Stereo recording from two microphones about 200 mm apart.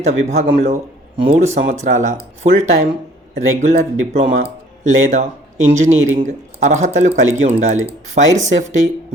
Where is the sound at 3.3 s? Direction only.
35° right (ahead or behind).